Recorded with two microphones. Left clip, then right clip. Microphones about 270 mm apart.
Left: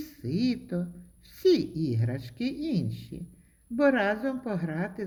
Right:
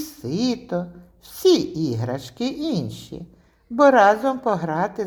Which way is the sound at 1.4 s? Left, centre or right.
Right.